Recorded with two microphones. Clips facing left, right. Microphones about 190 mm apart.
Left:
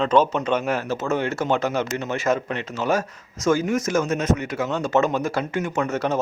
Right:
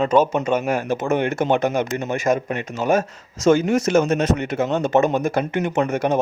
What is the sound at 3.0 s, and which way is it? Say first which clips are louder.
Speech: right 4 dB; 25° right (ahead or behind).